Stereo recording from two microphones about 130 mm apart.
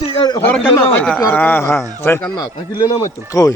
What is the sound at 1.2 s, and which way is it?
A man's voice, 20° left (ahead or behind).